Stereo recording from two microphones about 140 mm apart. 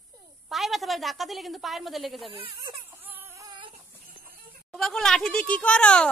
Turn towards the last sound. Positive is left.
turn(degrees=10)  # may be behind; listen again after turning